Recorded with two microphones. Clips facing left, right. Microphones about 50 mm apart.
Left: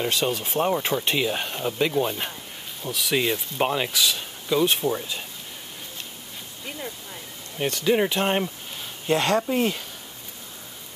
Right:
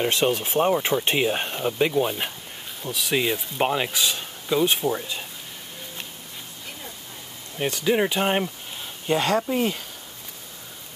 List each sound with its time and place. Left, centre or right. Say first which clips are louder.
0.0 s speech: right 3 dB; right
0.4 s speech: right 2 dB; centre
1.0 s speech: right 2 dB; right
1.5 s speech: right 2 dB; centre
2.8 s speech: even; centre
3.9 s speech: left 1 dB; centre
4.5 s speech: even; centre
7.5 s speech: even; centre